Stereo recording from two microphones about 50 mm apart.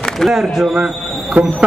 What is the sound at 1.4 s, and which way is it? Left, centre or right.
Speech, right.